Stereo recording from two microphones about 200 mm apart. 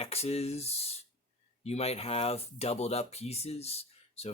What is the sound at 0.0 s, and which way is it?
Speech, 30° left (ahead or behind).